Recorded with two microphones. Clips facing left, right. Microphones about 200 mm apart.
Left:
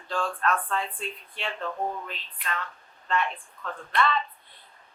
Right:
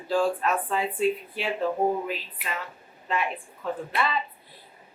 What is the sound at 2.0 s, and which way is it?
A woman's voice, 5° right (ahead or behind).